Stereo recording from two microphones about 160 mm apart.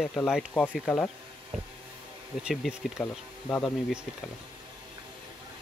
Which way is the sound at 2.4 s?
5° right (ahead or behind).